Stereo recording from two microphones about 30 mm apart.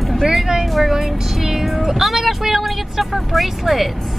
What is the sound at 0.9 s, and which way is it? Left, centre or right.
Vehicle, centre.